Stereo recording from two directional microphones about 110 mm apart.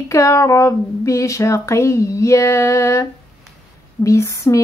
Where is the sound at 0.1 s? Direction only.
30° left (ahead or behind).